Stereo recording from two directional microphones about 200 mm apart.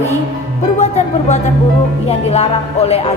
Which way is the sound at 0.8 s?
35° left (ahead or behind).